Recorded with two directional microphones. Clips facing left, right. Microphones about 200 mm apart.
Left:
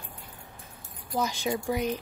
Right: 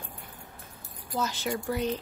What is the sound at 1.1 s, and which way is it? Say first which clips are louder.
Speech: left 2 dB; 15° left (ahead or behind).